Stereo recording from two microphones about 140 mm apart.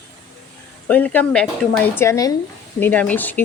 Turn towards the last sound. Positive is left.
turn(degrees=10)  # may be behind; listen again after turning